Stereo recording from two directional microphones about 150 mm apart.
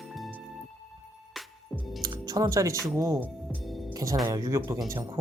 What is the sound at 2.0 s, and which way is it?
Speech, 25° right (ahead or behind).